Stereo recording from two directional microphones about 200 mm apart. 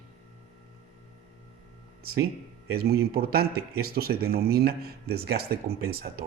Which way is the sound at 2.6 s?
50° right (ahead or behind).